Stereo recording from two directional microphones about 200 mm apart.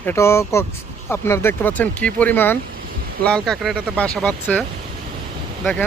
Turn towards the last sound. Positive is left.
turn(degrees=5)  # may be behind; listen again after turning